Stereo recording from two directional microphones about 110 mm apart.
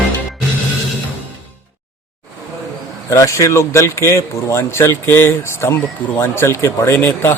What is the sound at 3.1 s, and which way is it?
A man's voice, 30° left (ahead or behind).